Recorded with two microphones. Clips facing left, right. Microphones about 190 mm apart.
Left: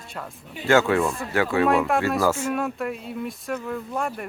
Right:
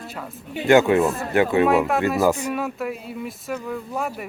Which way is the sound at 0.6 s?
20° right (ahead or behind).